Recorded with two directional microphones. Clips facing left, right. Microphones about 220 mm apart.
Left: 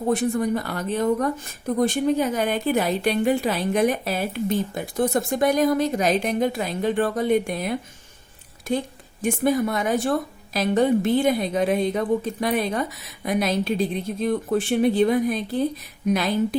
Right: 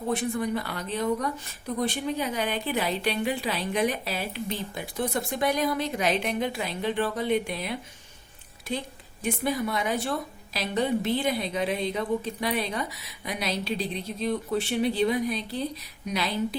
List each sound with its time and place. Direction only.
0.1 s speech: 45° left (ahead or behind)